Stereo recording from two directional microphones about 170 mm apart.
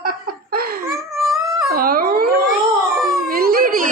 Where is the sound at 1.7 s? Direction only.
60° right (ahead or behind).